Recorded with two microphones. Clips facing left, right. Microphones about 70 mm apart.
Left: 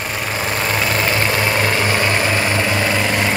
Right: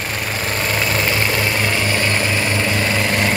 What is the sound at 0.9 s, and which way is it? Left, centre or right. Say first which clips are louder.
Vehicle: left 1 dB; centre.